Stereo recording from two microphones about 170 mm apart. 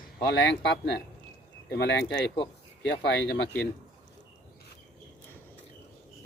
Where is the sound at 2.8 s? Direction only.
85° left.